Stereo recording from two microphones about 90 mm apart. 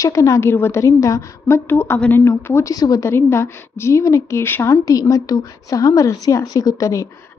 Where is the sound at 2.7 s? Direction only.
45° left (ahead or behind).